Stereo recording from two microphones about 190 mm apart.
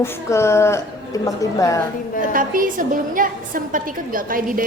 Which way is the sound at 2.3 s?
45° right (ahead or behind).